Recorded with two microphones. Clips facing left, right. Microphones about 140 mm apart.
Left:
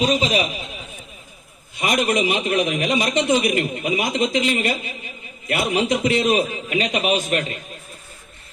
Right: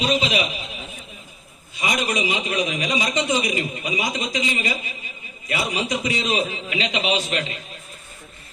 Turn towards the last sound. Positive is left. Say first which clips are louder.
# left 3 dB
turn(degrees=50)  # may be behind; listen again after turning